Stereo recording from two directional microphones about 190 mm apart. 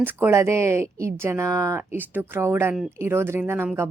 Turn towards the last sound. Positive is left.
turn(degrees=-10)  # may be behind; listen again after turning